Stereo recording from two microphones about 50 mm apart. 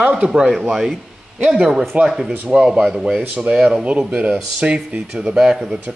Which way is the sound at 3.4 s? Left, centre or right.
Right.